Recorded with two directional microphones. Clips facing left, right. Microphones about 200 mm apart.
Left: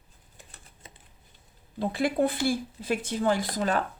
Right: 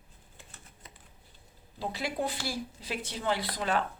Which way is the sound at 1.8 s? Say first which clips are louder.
Left 8 dB; 50° left (ahead or behind).